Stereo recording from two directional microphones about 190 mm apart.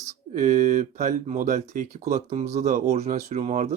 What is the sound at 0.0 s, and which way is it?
Speech, 40° right (ahead or behind).